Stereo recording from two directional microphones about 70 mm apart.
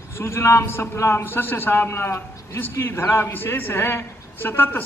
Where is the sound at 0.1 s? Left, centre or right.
Left.